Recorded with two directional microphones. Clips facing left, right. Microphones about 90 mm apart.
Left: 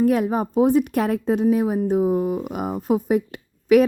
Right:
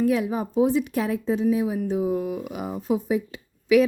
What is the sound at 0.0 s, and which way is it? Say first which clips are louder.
A woman's voice: left 4 dB; 50° left (ahead or behind).